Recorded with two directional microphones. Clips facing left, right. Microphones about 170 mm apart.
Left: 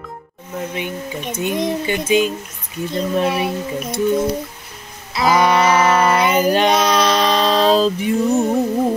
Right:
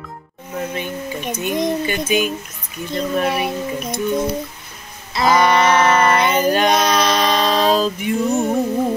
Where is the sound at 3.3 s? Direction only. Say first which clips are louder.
Left 1 dB; 5° left (ahead or behind).